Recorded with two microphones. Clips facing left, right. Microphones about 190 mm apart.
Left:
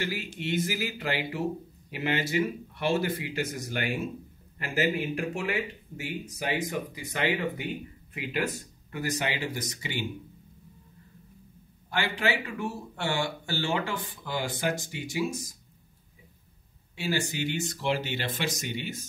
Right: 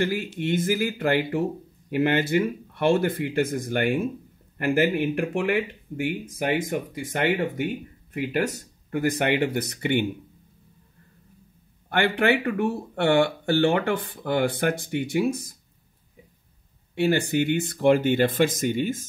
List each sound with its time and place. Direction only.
0.0 s speech: 50° right (ahead or behind)
11.9 s speech: 60° right (ahead or behind)
16.9 s speech: 60° right (ahead or behind)